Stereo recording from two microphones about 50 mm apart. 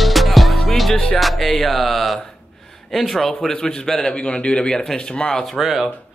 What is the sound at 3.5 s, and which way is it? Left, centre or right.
A man's voice, centre.